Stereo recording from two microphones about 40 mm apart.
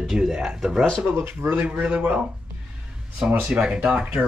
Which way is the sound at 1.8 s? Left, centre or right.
Right.